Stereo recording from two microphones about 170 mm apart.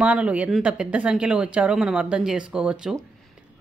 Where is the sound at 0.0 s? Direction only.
10° right (ahead or behind).